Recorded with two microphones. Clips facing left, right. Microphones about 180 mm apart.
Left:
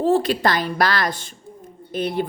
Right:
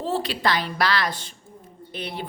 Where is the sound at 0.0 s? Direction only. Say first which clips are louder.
Left 7 dB; 50° left (ahead or behind).